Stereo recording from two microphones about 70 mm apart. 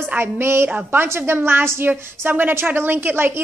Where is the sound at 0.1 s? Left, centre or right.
Right.